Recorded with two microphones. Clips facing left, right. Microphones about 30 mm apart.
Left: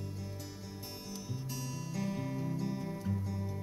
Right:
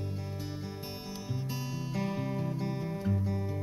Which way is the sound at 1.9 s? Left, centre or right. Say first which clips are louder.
Right 3 dB; right.